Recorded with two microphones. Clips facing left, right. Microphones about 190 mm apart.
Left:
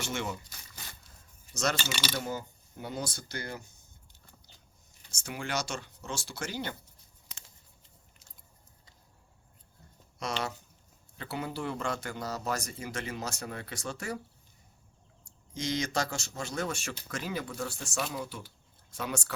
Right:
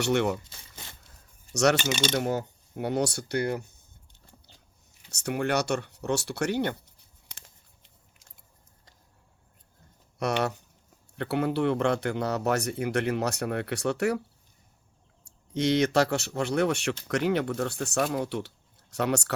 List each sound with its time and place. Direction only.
0.0 s a man's voice: 65° right (ahead or behind)
1.7 s speech: 20° right (ahead or behind)
2.1 s a man's voice: 65° right (ahead or behind)
5.1 s a man's voice: 65° right (ahead or behind)
7.3 s a sound: 60° right (ahead or behind)
10.2 s a man's voice: 65° right (ahead or behind)
15.2 s a man's voice: 65° right (ahead or behind)